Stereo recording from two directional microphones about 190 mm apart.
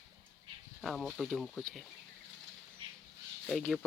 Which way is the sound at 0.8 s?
Centre (ahead or behind).